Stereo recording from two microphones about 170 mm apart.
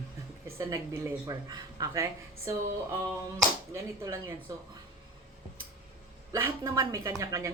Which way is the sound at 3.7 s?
15° right (ahead or behind).